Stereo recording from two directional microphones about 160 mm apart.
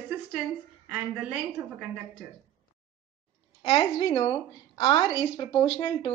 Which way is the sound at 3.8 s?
35° left (ahead or behind).